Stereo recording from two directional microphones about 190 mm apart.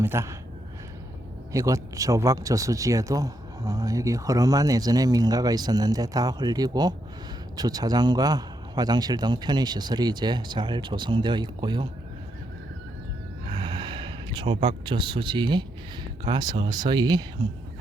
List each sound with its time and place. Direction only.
0.0 s speech: 15° right (ahead or behind)
1.5 s speech: 15° right (ahead or behind)
13.5 s speech: 25° right (ahead or behind)